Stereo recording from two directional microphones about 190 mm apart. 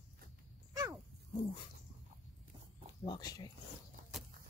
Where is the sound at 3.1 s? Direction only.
20° left (ahead or behind).